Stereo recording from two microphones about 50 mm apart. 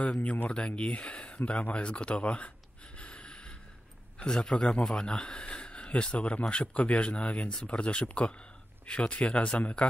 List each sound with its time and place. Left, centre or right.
0.0 s speech: left
3.0 s snort: left
4.2 s a man's voice: centre